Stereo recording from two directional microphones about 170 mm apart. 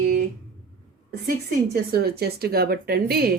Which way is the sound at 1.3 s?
65° right (ahead or behind).